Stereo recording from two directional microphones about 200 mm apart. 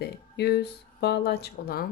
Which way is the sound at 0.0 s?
55° left (ahead or behind).